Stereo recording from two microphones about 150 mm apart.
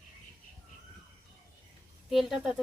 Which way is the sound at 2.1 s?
Centre (ahead or behind).